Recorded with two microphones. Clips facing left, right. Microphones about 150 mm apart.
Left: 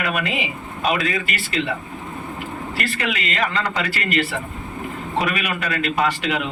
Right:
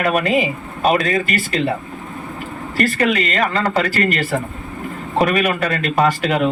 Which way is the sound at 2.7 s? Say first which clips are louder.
Right 10 dB; 45° right (ahead or behind).